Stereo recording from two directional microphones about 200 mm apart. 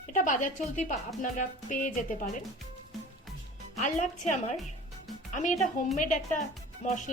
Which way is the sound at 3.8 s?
35° left (ahead or behind).